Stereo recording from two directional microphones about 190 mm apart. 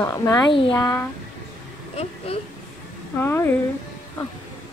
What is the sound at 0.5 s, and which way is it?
Speech, 25° left (ahead or behind).